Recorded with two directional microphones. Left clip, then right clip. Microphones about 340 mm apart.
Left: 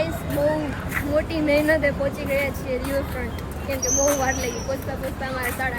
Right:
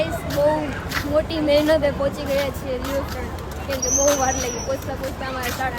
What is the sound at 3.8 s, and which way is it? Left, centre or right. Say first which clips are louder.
Speech: right 2 dB; centre.